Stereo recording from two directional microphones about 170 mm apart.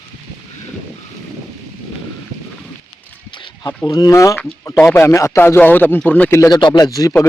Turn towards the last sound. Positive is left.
turn(degrees=20)  # may be behind; listen again after turning